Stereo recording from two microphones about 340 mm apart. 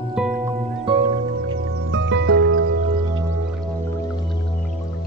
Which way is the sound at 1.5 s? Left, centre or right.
Right.